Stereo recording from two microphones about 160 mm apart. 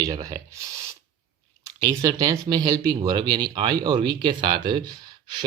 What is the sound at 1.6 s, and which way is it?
Speech, 20° right (ahead or behind).